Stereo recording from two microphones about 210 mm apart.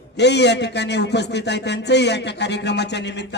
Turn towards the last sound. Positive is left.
turn(degrees=55)  # may be behind; listen again after turning